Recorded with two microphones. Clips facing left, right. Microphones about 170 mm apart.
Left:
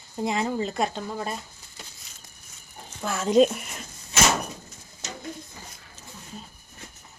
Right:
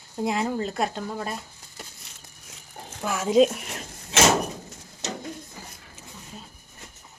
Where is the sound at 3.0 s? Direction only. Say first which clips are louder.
Even; 10° right (ahead or behind).